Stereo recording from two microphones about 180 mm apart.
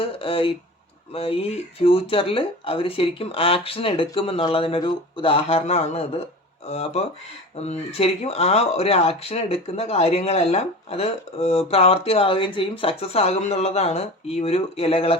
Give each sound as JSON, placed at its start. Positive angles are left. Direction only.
{"t": 0.0, "sound": "speech", "side_deg": 30}